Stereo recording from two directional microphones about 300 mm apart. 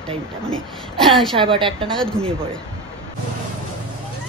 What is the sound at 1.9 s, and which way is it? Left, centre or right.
Speech, centre.